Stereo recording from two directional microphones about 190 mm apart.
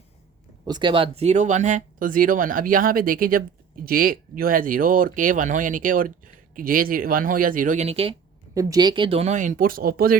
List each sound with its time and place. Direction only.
0.7 s speech: 25° right (ahead or behind)
8.5 s speech: 20° right (ahead or behind); by 10.2 s 50° right (ahead or behind)